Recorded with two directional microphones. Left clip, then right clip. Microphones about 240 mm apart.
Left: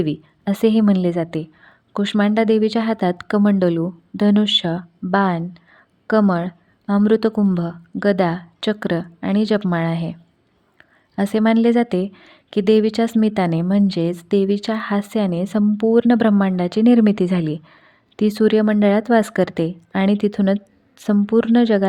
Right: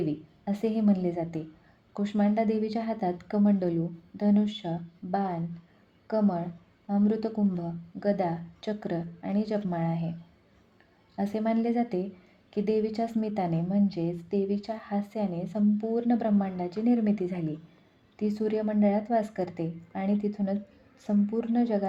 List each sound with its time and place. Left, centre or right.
0.0 s a woman's voice: left
11.2 s a woman's voice: left